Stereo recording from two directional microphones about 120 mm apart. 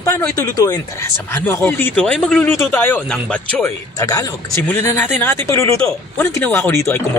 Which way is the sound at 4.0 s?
30° left (ahead or behind).